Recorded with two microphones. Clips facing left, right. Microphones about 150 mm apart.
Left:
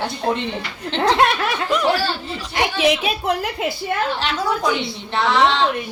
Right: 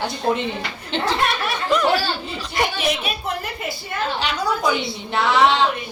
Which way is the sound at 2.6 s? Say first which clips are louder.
Left 4 dB; 90° left.